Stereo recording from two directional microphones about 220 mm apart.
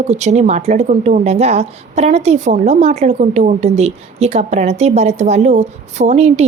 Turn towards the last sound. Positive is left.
turn(degrees=-30)  # may be behind; listen again after turning